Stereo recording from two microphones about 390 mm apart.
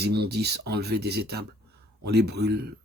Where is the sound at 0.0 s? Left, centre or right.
Right.